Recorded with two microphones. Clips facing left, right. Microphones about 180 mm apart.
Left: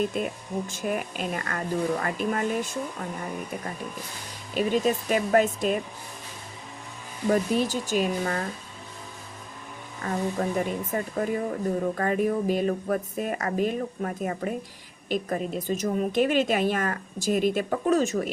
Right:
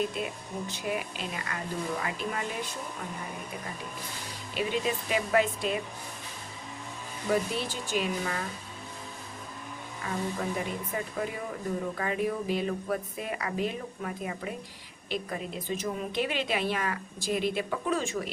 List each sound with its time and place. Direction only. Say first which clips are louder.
0.1 s a woman's voice: left 5 dB; 45° left (ahead or behind)
4.5 s a woman's voice: left 6 dB; 40° left (ahead or behind)
7.3 s a woman's voice: left 6 dB; 40° left (ahead or behind)
10.1 s a woman's voice: left 5 dB; 45° left (ahead or behind)